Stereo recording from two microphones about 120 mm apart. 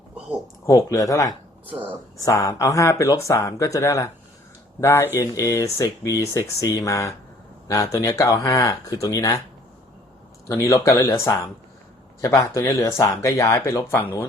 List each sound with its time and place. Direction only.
0.6 s speech: 25° left (ahead or behind)
1.7 s speech: 15° right (ahead or behind)
2.1 s speech: 30° left (ahead or behind)
10.5 s speech: 25° left (ahead or behind)